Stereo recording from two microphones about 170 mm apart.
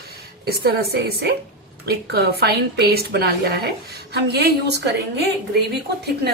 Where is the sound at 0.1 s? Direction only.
70° right (ahead or behind).